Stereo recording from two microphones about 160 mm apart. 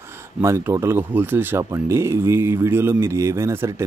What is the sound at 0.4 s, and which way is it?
Speech, 15° right (ahead or behind).